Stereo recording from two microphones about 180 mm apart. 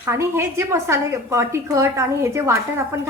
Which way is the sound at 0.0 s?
15° right (ahead or behind).